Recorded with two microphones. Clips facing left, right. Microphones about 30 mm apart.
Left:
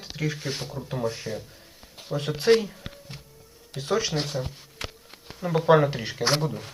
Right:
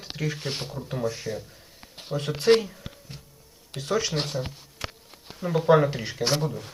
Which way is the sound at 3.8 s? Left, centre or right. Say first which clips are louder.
Even; centre.